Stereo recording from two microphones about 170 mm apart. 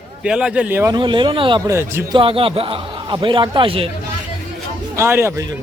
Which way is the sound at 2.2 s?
30° right (ahead or behind).